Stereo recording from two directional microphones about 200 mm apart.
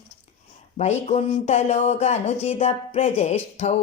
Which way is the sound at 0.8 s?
35° left (ahead or behind).